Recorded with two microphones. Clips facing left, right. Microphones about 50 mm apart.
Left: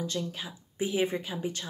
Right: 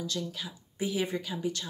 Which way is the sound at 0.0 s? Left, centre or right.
Left.